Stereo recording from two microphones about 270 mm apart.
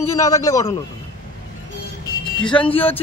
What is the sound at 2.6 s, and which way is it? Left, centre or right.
Speech, centre.